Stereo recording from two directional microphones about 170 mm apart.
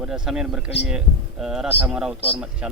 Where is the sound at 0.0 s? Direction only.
5° right (ahead or behind).